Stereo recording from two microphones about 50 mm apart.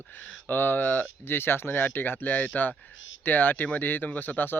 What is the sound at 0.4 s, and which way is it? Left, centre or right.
Speech, left.